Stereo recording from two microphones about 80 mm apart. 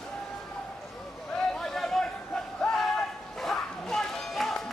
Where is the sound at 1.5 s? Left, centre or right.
Centre.